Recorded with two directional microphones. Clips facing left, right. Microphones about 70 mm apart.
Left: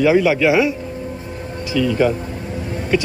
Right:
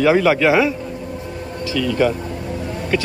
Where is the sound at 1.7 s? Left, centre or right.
Centre.